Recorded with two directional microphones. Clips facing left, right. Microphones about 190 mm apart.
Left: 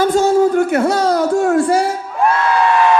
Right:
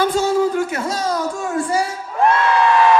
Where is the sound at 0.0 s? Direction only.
45° left (ahead or behind); by 1.9 s 65° left (ahead or behind).